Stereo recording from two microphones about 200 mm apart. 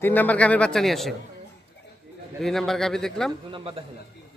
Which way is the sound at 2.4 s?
Centre (ahead or behind).